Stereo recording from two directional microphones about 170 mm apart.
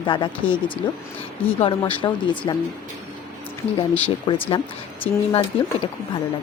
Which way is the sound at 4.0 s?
30° left (ahead or behind).